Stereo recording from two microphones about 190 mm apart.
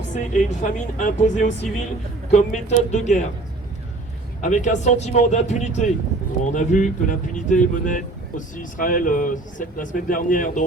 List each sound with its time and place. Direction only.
0.1 s speech: 45° left (ahead or behind)
4.4 s speech: 40° left (ahead or behind)